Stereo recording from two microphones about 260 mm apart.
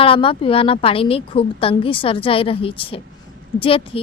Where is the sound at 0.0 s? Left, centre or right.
Left.